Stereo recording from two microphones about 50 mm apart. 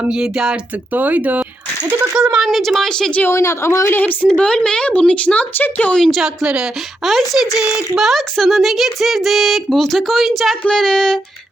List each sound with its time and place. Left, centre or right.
0.1 s speech: centre
0.9 s speech: right
2.1 s speech: centre
2.5 s speech: centre
3.2 s a woman's voice: left
4.4 s a woman's voice: centre
6.1 s speech: centre
10.8 s a sound: centre